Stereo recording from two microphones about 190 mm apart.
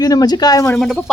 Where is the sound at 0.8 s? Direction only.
Centre (ahead or behind).